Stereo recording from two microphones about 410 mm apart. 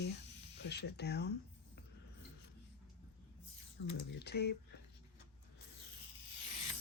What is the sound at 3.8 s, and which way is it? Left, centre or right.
Speech, left.